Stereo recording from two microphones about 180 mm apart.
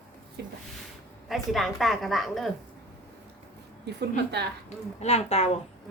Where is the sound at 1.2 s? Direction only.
Centre (ahead or behind).